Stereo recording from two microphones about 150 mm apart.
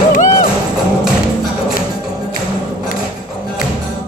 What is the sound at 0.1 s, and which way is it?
Music, 65° left (ahead or behind).